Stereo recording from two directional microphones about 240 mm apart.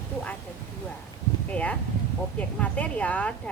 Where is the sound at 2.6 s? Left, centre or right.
Centre.